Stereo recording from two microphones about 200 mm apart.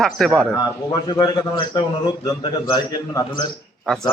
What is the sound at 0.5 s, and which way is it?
A man's voice, 20° left (ahead or behind).